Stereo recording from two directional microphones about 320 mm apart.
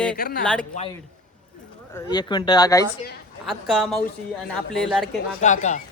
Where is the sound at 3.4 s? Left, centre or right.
Centre.